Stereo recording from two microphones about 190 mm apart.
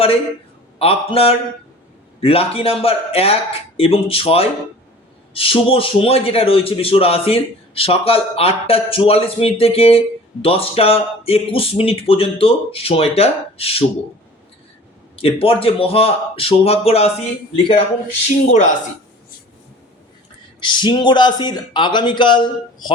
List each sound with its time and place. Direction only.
0.8 s a man's voice: 30° left (ahead or behind)
15.1 s speech: 30° left (ahead or behind)
20.6 s speech: 25° left (ahead or behind)